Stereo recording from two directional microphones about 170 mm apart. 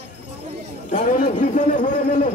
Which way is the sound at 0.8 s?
50° left (ahead or behind).